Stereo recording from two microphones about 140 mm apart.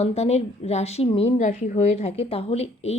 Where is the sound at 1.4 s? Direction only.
65° left (ahead or behind); by 3.0 s 50° left (ahead or behind).